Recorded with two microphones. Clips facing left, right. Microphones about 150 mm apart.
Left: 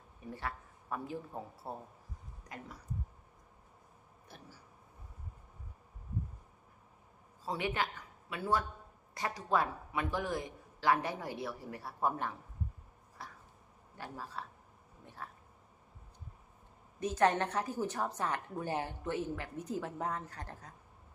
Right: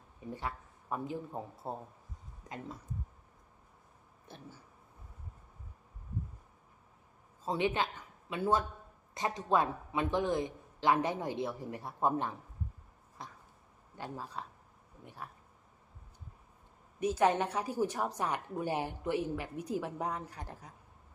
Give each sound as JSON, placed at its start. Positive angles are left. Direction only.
{"t": 0.3, "sound": "a man's voice", "side_deg": -20}
{"t": 7.4, "sound": "a man's voice", "side_deg": -20}
{"t": 13.2, "sound": "a sound", "side_deg": -20}
{"t": 13.9, "sound": "a man's voice", "side_deg": -20}
{"t": 17.0, "sound": "a woman's voice", "side_deg": -10}